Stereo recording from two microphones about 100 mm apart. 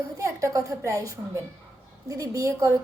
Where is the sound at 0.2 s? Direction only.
30° right (ahead or behind).